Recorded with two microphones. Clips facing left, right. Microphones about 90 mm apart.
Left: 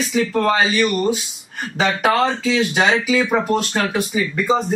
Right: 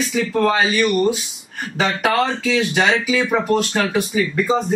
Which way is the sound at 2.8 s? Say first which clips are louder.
Even; 35° left (ahead or behind).